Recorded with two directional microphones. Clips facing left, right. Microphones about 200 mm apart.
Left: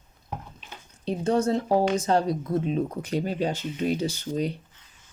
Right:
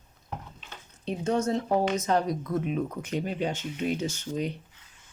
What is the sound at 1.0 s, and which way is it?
Speech, 35° left (ahead or behind).